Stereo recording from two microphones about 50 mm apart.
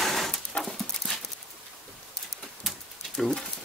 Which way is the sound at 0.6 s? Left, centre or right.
Centre.